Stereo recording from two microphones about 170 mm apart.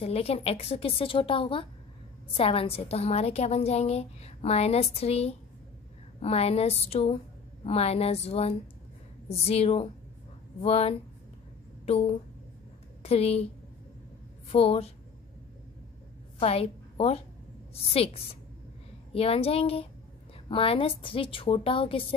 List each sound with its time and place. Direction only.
0.0 s a woman's voice: 35° left (ahead or behind)
14.5 s a woman's voice: 35° left (ahead or behind)
16.3 s a woman's voice: 35° left (ahead or behind)